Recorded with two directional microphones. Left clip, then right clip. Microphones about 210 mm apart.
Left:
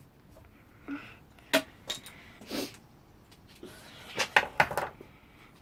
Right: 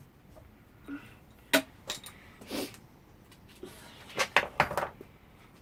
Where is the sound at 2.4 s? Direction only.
5° left (ahead or behind).